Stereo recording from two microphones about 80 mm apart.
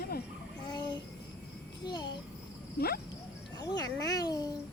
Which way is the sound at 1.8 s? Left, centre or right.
Left.